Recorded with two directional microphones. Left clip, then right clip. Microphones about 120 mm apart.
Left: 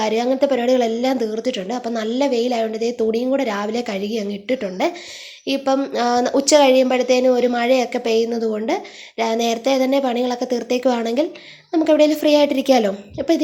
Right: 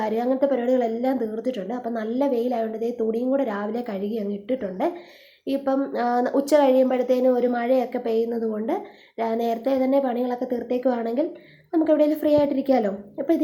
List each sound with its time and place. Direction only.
0.0 s a woman's voice: 25° left (ahead or behind)
0.9 s a woman's voice: 30° left (ahead or behind)
1.6 s a woman's voice: 35° left (ahead or behind)
2.0 s a woman's voice: 25° left (ahead or behind)